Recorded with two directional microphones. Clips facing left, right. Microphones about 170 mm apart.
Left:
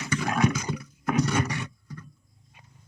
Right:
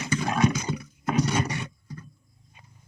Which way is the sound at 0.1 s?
25° right (ahead or behind).